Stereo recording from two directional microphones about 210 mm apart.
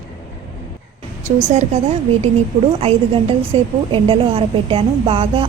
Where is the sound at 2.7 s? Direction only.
25° right (ahead or behind).